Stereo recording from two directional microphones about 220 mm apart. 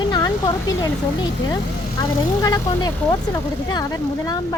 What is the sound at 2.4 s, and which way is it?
Speech, 15° left (ahead or behind).